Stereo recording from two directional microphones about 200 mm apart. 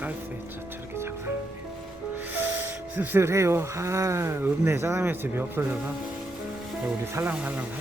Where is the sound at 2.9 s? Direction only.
10° right (ahead or behind).